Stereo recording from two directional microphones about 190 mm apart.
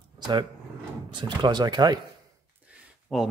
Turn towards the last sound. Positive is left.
turn(degrees=0)  # may be behind; listen again after turning